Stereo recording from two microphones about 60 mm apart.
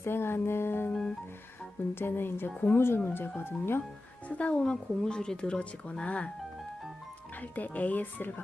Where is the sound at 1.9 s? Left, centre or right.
Left.